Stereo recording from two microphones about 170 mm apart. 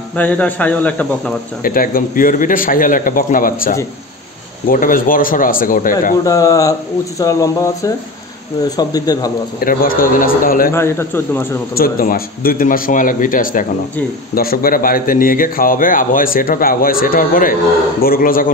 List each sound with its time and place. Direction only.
0.1 s speech: 10° left (ahead or behind)
1.6 s a man's voice: 55° left (ahead or behind)
6.2 s speech: 20° left (ahead or behind)
9.6 s a man's voice: 55° left (ahead or behind)
10.7 s speech: 15° left (ahead or behind)
11.7 s a man's voice: 60° left (ahead or behind)